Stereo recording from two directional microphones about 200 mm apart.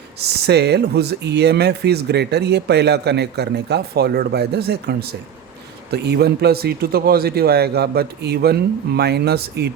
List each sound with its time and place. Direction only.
0.2 s a man's voice: 55° right (ahead or behind)